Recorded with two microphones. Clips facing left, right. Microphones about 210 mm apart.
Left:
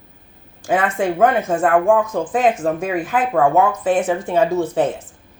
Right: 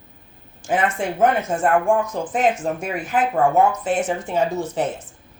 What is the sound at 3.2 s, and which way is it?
Speech, 75° left (ahead or behind).